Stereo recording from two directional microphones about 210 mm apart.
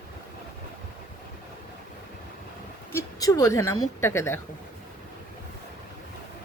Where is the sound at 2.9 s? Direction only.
15° left (ahead or behind).